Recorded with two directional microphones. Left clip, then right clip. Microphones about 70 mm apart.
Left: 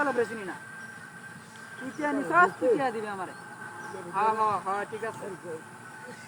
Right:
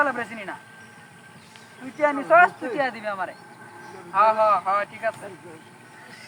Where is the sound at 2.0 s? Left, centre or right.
Right.